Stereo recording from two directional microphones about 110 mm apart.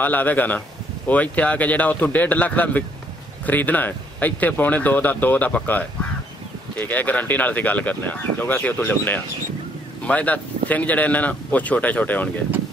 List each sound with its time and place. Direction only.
0.0 s speech: 15° left (ahead or behind)